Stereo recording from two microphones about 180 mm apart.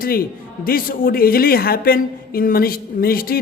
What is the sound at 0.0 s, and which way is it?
A man's voice, 55° left (ahead or behind).